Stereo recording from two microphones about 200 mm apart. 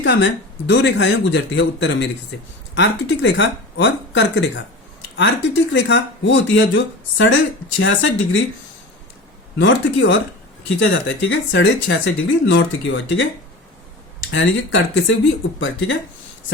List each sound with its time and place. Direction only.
0.0 s speech: 65° left (ahead or behind)
9.6 s speech: 65° left (ahead or behind)
14.3 s speech: 70° left (ahead or behind)